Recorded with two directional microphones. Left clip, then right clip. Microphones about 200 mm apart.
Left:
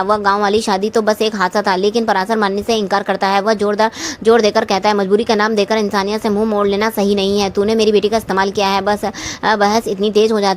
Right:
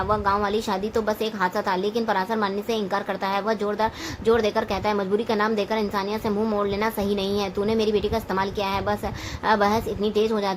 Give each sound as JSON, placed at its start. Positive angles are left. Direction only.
{"t": 0.1, "sound": "a woman's voice", "side_deg": 40}